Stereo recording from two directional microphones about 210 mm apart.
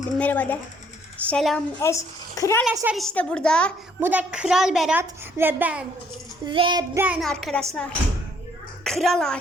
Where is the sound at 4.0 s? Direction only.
10° right (ahead or behind).